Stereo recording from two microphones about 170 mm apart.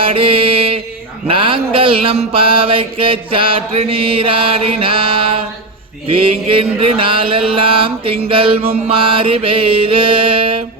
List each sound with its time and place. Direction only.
0.0 s mantra: 30° right (ahead or behind)